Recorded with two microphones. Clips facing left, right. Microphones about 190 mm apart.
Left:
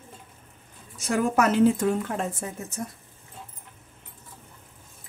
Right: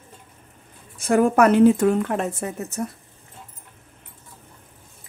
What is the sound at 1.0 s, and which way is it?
Speech, 55° right (ahead or behind).